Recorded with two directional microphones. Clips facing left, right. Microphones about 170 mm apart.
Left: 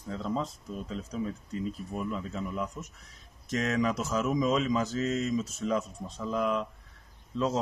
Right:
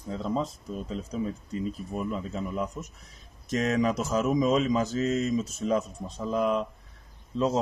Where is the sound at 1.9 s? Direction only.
25° right (ahead or behind).